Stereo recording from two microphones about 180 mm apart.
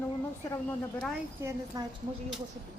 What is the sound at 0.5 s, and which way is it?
Speech, 5° left (ahead or behind).